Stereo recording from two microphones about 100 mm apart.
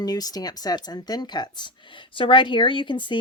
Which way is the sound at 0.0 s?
40° left (ahead or behind).